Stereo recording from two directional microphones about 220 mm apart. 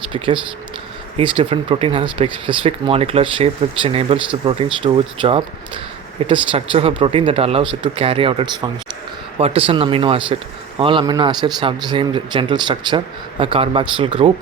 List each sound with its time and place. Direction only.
1.2 s speech: 25° right (ahead or behind)